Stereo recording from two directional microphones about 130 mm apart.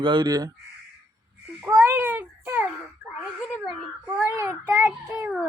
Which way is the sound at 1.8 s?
15° right (ahead or behind).